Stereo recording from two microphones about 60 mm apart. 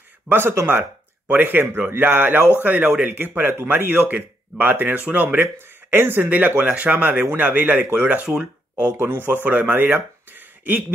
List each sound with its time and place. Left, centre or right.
0.3 s speech: right
8.3 s speech: centre
8.9 s speech: right